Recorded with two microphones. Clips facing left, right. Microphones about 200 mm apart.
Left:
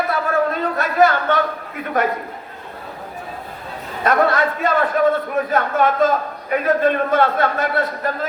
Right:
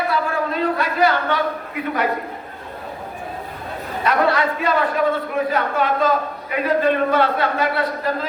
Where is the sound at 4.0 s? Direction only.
45° left (ahead or behind).